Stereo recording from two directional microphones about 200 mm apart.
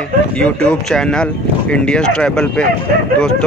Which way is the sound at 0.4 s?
5° left (ahead or behind).